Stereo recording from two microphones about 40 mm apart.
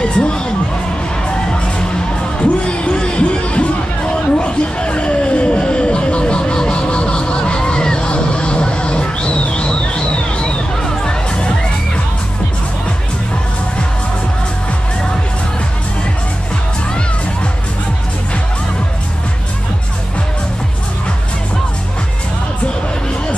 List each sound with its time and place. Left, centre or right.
0.0 s speech: left
2.6 s music: left